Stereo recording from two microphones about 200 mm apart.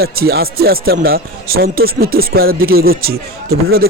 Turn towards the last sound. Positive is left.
turn(degrees=-50)  # may be behind; listen again after turning